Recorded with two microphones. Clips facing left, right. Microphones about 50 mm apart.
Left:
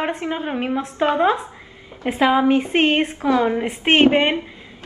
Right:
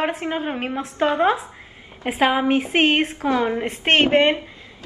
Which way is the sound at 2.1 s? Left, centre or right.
Centre.